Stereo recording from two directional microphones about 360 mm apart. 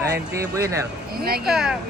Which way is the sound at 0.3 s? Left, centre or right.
Centre.